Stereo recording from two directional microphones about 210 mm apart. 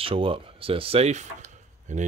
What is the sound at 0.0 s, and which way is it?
Speech, 25° right (ahead or behind).